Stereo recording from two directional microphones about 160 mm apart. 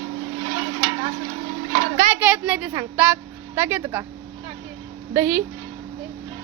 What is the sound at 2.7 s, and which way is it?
A woman's voice, 15° right (ahead or behind).